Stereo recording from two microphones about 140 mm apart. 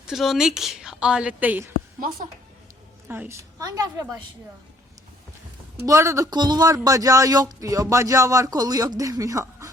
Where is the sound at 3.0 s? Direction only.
15° right (ahead or behind).